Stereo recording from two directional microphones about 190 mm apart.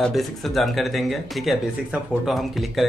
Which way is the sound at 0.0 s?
Centre (ahead or behind).